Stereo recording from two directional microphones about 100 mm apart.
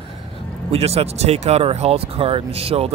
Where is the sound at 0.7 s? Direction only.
90° right.